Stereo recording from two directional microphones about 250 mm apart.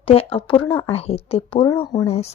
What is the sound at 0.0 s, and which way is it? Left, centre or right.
Speech, left.